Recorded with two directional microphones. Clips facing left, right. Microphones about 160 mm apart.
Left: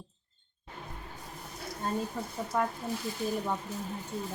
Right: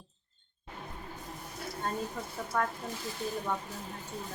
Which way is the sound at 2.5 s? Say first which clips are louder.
Left 1 dB; 10° left (ahead or behind).